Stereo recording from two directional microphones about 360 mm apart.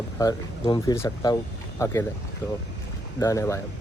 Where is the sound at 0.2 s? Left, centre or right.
Centre.